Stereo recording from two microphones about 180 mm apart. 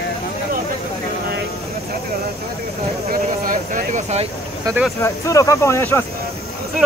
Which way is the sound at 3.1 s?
50° right (ahead or behind).